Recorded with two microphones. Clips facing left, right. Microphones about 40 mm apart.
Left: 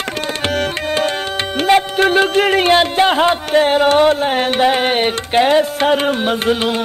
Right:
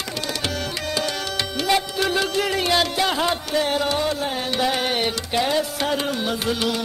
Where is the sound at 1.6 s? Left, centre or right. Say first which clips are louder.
Left 9 dB; left.